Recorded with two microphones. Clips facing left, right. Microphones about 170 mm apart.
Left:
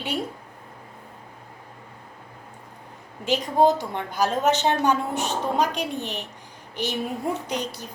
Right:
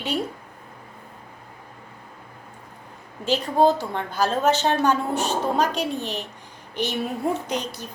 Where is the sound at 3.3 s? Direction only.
15° left (ahead or behind).